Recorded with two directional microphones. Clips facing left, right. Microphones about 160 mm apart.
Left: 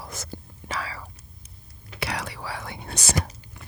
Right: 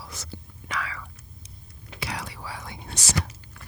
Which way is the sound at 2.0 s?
70° left (ahead or behind).